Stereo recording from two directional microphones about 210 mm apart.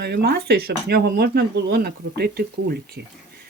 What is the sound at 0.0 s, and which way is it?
Speech, 50° right (ahead or behind).